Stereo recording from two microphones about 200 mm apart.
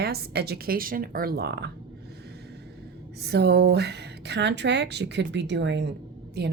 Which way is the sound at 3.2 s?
55° right (ahead or behind).